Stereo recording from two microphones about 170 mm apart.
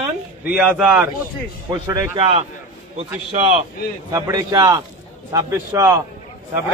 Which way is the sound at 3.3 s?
35° right (ahead or behind).